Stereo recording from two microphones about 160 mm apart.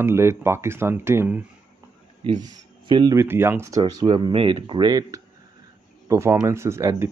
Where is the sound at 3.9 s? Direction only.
30° right (ahead or behind).